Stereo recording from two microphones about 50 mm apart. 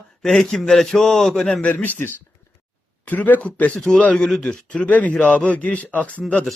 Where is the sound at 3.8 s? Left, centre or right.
Centre.